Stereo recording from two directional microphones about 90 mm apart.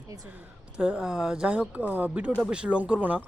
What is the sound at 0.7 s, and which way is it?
Speech, 10° right (ahead or behind).